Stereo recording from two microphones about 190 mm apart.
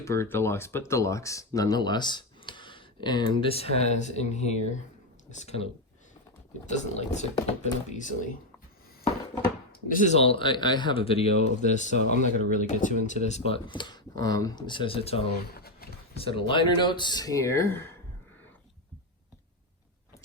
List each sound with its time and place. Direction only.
0.0 s speech: 15° left (ahead or behind); by 5.6 s 35° left (ahead or behind)
6.7 s speech: 35° left (ahead or behind)
9.9 s speech: 40° left (ahead or behind)
15.5 s a sound: 55° left (ahead or behind)
16.1 s speech: 30° left (ahead or behind); by 17.9 s 10° left (ahead or behind)